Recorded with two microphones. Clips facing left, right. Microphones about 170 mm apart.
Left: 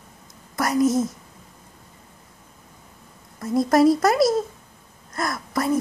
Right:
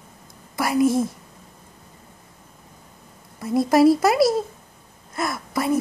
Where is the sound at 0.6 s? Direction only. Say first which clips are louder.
Right 1 dB; 5° right (ahead or behind).